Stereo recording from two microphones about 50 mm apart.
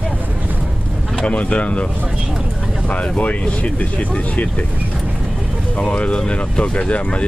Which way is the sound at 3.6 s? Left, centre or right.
Left.